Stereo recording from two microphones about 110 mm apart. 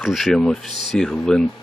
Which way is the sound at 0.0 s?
Centre (ahead or behind).